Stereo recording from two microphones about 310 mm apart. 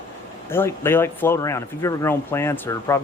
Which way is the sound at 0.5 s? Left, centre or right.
Centre.